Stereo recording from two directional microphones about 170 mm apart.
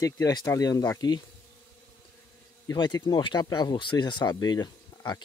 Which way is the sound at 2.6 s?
25° left (ahead or behind).